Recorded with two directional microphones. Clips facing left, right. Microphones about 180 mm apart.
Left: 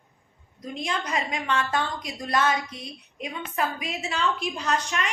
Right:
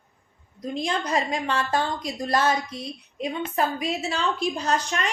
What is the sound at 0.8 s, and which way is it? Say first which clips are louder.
A woman's voice: right 3 dB; 35° right (ahead or behind).